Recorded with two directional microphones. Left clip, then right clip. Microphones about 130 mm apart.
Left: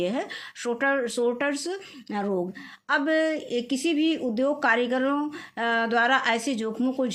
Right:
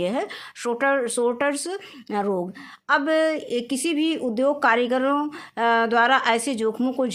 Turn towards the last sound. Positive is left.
turn(degrees=-40)  # may be behind; listen again after turning